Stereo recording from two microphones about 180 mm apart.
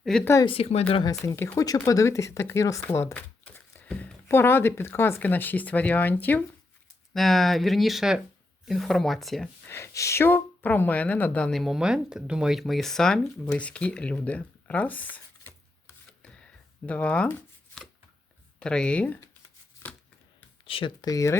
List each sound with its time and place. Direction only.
0.0 s speech: 5° left (ahead or behind)
0.4 s speech: 30° left (ahead or behind)
1.2 s speech: 15° left (ahead or behind)
9.6 s speech: 15° left (ahead or behind)
16.2 s a sound: 5° left (ahead or behind)
18.6 s speech: 5° left (ahead or behind)
20.7 s speech: 30° left (ahead or behind)